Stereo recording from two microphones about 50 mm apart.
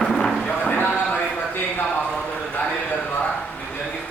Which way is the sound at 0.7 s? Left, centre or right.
Left.